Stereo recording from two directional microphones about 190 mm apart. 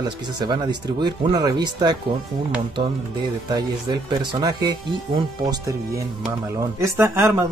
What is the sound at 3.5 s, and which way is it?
Speech, 25° right (ahead or behind).